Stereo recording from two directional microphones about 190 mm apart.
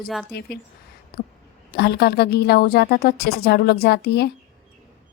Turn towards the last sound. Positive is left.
turn(degrees=60)  # may be behind; listen again after turning